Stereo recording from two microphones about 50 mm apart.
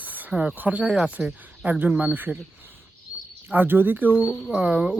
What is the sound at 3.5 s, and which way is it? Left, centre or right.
Speech, right.